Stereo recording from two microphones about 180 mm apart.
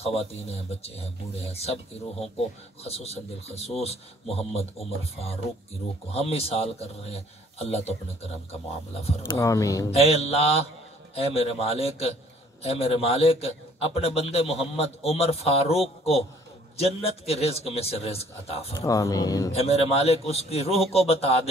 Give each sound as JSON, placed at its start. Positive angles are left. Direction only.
{"t": 0.0, "sound": "a man's voice", "side_deg": 35}
{"t": 2.8, "sound": "a man's voice", "side_deg": 35}
{"t": 9.3, "sound": "speech", "side_deg": 15}
{"t": 9.8, "sound": "a man's voice", "side_deg": 35}
{"t": 18.8, "sound": "speech", "side_deg": 20}
{"t": 19.5, "sound": "a man's voice", "side_deg": 35}